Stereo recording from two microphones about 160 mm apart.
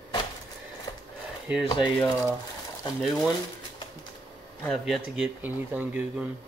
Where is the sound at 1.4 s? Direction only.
5° right (ahead or behind).